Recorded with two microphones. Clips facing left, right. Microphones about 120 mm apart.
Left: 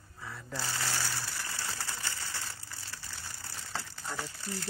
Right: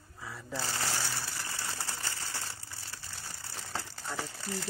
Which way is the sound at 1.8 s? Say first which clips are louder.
Even; 20° right (ahead or behind).